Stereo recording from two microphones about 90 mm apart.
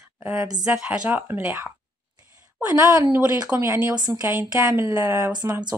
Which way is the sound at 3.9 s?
50° right (ahead or behind).